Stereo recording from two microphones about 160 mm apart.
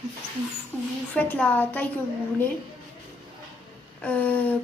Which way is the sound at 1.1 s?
10° left (ahead or behind).